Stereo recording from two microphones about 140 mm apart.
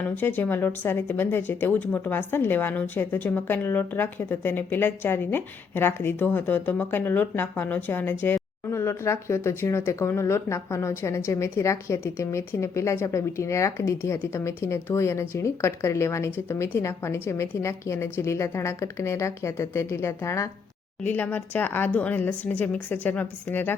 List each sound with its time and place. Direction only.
0.2 s speech: 15° left (ahead or behind)